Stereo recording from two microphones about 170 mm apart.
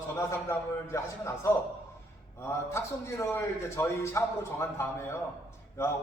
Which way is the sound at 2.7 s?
15° left (ahead or behind).